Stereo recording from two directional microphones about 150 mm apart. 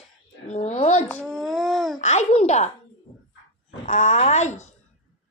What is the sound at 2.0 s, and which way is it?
Speech, 50° left (ahead or behind).